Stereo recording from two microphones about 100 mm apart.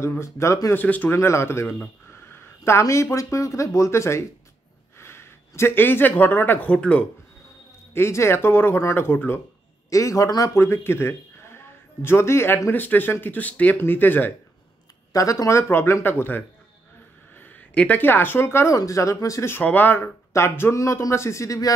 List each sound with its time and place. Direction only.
0.0 s a man's voice: 30° left (ahead or behind)
0.7 s a man's voice: 15° left (ahead or behind)
7.9 s a man's voice: 25° left (ahead or behind)
9.8 s a man's voice: 35° left (ahead or behind)
15.1 s a man's voice: 35° left (ahead or behind)
19.5 s a man's voice: 20° left (ahead or behind); by 21.7 s 35° left (ahead or behind)